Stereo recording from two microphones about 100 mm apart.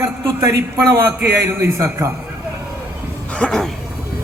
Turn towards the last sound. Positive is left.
turn(degrees=5)  # may be behind; listen again after turning